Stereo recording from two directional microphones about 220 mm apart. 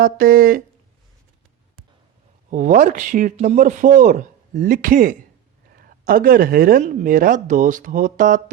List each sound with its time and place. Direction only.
0.0 s speech: 40° right (ahead or behind)
2.5 s speech: 35° right (ahead or behind)